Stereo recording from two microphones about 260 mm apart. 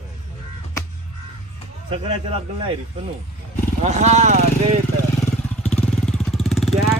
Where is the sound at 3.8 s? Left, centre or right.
Right.